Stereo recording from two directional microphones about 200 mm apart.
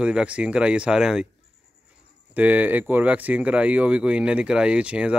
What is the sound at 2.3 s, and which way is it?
Speech, 10° right (ahead or behind).